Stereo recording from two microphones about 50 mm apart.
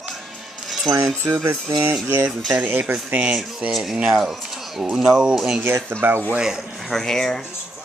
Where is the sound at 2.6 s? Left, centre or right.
Right.